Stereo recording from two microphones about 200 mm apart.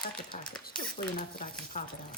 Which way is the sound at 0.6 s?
45° left (ahead or behind).